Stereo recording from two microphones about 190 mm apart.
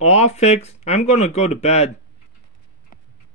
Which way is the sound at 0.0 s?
35° left (ahead or behind).